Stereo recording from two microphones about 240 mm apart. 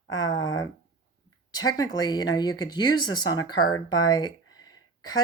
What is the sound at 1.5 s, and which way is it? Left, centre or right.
Speech, centre.